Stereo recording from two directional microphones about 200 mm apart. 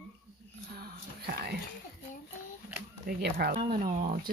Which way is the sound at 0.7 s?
50° right (ahead or behind).